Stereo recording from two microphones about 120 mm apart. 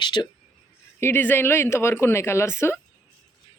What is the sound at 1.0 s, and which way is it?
Speech, 20° left (ahead or behind).